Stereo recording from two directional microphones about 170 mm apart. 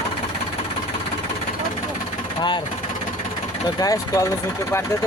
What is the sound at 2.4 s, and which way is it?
Speech, 25° left (ahead or behind).